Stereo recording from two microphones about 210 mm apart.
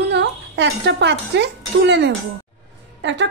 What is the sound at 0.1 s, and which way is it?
A woman's voice, 55° right (ahead or behind).